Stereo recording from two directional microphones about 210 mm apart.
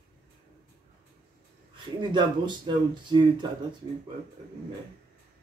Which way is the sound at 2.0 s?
20° right (ahead or behind).